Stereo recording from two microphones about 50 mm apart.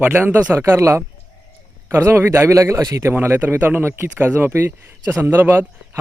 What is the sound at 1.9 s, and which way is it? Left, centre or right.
Speech, right.